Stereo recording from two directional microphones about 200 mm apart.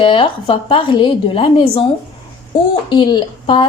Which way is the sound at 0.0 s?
25° left (ahead or behind).